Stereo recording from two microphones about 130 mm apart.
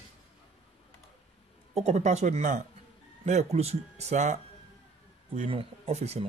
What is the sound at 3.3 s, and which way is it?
A man's voice, 60° right (ahead or behind).